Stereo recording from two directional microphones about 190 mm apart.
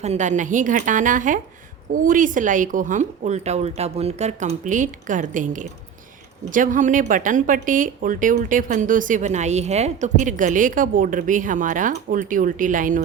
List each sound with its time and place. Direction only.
0.0 s speech: 35° right (ahead or behind)